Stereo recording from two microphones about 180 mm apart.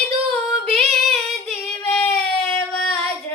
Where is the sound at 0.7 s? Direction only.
35° right (ahead or behind).